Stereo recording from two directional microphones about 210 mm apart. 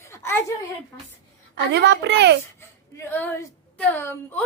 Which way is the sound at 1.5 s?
55° right (ahead or behind).